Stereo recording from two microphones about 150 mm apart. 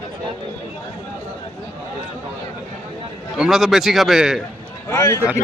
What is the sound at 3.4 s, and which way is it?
A man's voice, centre (ahead or behind).